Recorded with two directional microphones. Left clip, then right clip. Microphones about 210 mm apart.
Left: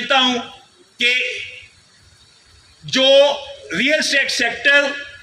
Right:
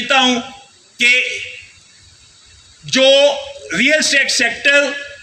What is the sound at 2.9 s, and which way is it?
A man's voice, 50° right (ahead or behind).